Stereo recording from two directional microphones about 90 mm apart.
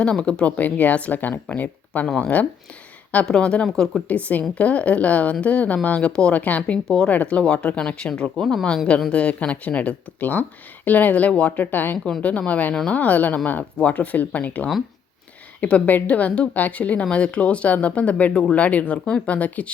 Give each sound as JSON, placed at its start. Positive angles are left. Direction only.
{"t": 0.0, "sound": "a woman's voice", "side_deg": 10}
{"t": 4.1, "sound": "a woman's voice", "side_deg": 15}